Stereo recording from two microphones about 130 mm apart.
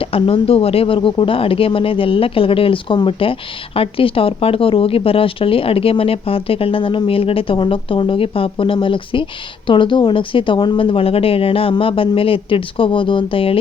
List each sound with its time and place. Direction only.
0.0 s speech: 45° left (ahead or behind)